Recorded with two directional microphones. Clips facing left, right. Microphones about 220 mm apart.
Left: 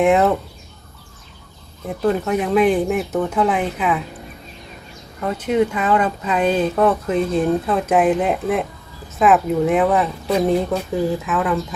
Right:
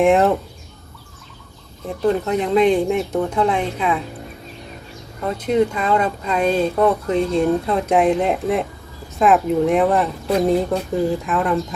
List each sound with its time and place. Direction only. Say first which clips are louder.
0.0 s speech: right 1 dB; centre (ahead or behind)
1.9 s speech: even; 5° left (ahead or behind)
5.2 s speech: even; 5° left (ahead or behind)